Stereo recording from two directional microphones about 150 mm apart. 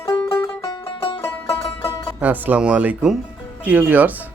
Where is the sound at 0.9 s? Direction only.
35° left (ahead or behind).